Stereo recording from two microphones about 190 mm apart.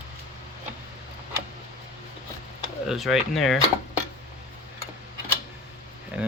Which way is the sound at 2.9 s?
Centre (ahead or behind).